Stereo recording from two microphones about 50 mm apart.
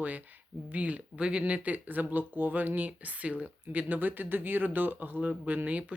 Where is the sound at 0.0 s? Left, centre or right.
Right.